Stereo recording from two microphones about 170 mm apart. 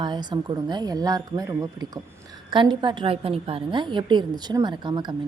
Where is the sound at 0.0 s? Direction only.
25° right (ahead or behind).